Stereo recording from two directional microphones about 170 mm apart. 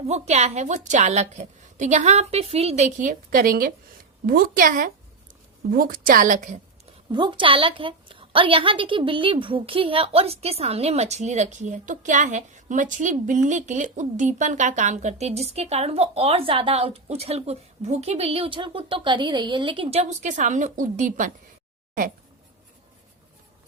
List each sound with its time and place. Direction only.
0.1 s a woman's voice: 40° right (ahead or behind)
7.1 s a woman's voice: 30° right (ahead or behind); by 21.3 s 50° right (ahead or behind)